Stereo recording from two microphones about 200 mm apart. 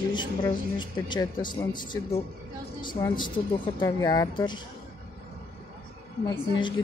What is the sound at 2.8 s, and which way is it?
Speech, 25° left (ahead or behind).